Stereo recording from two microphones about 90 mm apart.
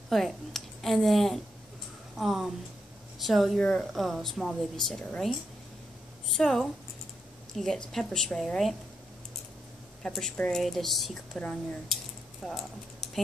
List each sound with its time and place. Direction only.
0.1 s a woman's voice: 5° left (ahead or behind)
6.3 s a woman's voice: 5° left (ahead or behind)
10.0 s a woman's voice: 5° left (ahead or behind)
10.3 s a woman's voice: 15° left (ahead or behind)
10.6 s a woman's voice: centre (ahead or behind)